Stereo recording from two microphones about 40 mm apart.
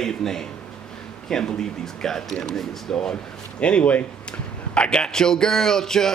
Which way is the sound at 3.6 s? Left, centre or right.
Left.